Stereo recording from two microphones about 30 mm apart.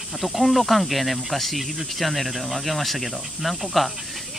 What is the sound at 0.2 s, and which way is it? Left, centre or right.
Speech, centre.